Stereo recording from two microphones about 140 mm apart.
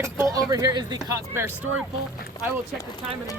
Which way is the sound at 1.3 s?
15° right (ahead or behind).